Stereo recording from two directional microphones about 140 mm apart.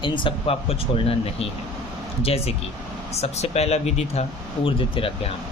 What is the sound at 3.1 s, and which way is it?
Speech, 50° left (ahead or behind).